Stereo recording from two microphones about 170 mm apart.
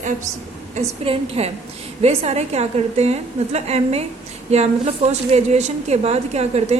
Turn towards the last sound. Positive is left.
turn(degrees=-40)  # may be behind; listen again after turning